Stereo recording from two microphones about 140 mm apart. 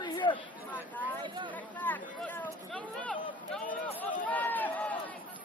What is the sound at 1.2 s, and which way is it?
Chatter, 35° right (ahead or behind).